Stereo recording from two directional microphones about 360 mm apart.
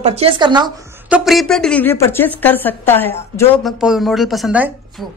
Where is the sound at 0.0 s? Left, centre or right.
Centre.